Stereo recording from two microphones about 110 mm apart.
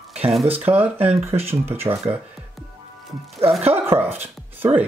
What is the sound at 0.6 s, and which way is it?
Speech, 15° right (ahead or behind).